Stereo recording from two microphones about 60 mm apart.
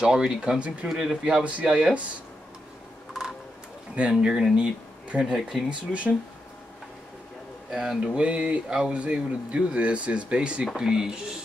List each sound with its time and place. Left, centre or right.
0.0 s speech: centre
1.4 s speech: right
3.9 s speech: centre
5.7 s speech: right
7.7 s speech: centre